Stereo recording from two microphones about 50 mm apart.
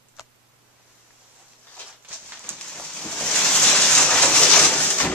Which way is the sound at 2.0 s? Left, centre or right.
Right.